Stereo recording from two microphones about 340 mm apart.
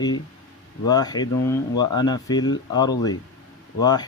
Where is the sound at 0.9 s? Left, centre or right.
Centre.